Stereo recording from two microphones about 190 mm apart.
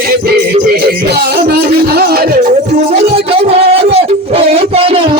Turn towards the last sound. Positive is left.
turn(degrees=-30)  # may be behind; listen again after turning